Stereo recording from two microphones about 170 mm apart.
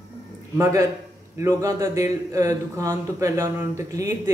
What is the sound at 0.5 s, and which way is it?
A man's voice, 20° right (ahead or behind).